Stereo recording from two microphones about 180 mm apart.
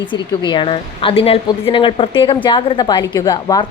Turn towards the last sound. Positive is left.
turn(degrees=20)  # may be behind; listen again after turning